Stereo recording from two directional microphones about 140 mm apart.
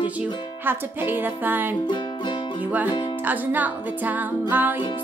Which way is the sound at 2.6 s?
10° right (ahead or behind).